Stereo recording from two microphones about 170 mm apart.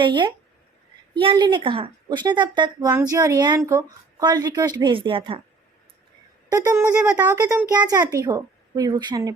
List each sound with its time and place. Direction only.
0.0 s speech: 30° right (ahead or behind)
6.5 s speech: 20° right (ahead or behind)